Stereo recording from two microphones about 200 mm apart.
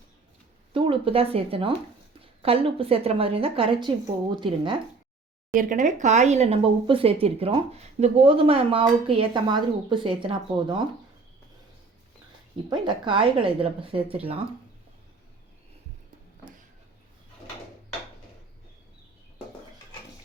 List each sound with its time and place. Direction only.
0.7 s speech: 25° right (ahead or behind)
5.5 s speech: 40° right (ahead or behind); by 10.8 s 25° right (ahead or behind)
12.7 s speech: 25° right (ahead or behind)